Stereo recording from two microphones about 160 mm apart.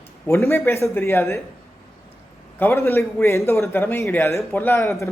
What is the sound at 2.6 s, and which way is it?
A man's voice, 15° left (ahead or behind).